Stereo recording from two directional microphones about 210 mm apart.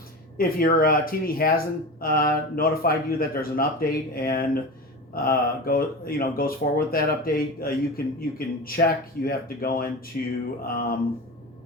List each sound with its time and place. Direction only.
0.3 s speech: 45° left (ahead or behind)
10.1 s a sound: 40° left (ahead or behind)
10.7 s speech: 45° left (ahead or behind)